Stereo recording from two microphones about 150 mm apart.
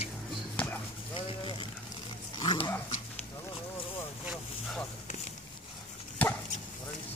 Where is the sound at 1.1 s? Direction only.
35° left (ahead or behind).